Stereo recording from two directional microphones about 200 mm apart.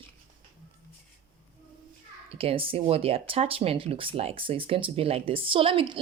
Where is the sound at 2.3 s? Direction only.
30° right (ahead or behind).